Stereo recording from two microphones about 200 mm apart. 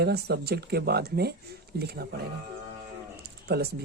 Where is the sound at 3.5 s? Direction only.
55° right (ahead or behind).